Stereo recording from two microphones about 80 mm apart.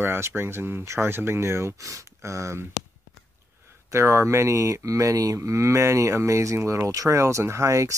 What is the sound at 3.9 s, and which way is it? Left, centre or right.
Speech, right.